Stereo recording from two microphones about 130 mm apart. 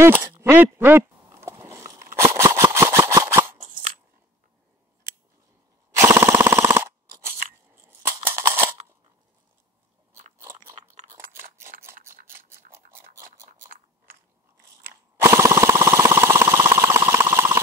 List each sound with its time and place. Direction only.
0.0 s speech: 20° right (ahead or behind)
0.4 s a sound: 15° right (ahead or behind)
5.9 s machine gun: 20° right (ahead or behind)
7.7 s scissors: 20° right (ahead or behind)
10.3 s crunch: 25° right (ahead or behind)
11.1 s scissors: 90° right
11.9 s a sound: 90° right
12.7 s chewing: 20° right (ahead or behind)
14.8 s jackhammer: 20° right (ahead or behind)